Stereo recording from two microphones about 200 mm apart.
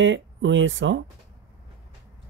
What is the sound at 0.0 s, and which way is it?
Speech, 70° right (ahead or behind).